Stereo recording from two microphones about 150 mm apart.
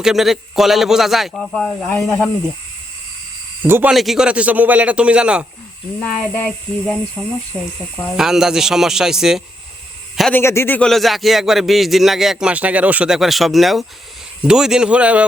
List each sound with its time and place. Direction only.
0.0 s a man's voice: 5° right (ahead or behind)
1.8 s speech: 20° left (ahead or behind)
3.6 s a man's voice: 10° right (ahead or behind)
3.9 s a man's voice: centre (ahead or behind)
6.0 s speech: 10° left (ahead or behind)
8.1 s a man's voice: 5° right (ahead or behind)
10.3 s a man's voice: 15° left (ahead or behind); by 15.2 s 10° right (ahead or behind)